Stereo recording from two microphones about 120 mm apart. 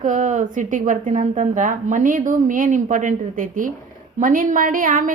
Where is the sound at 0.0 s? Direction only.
90° right.